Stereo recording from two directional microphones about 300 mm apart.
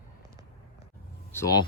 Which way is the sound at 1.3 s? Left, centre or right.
Centre.